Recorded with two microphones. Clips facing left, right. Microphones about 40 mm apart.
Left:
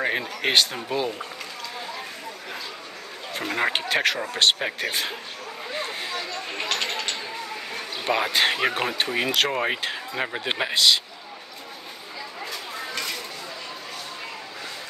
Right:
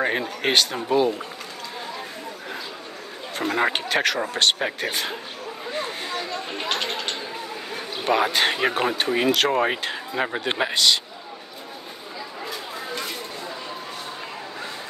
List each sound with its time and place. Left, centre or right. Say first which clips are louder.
0.5 s speech: right 1 dB; centre
3.3 s speech: right 2 dB; centre
5.7 s a sound: right 1 dB; centre
7.7 s speech: right 3 dB; centre
12.9 s chatter: even; right